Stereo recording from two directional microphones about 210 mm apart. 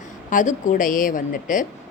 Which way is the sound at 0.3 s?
40° left (ahead or behind).